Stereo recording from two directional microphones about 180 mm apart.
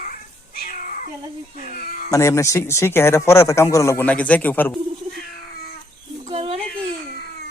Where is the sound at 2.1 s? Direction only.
15° left (ahead or behind).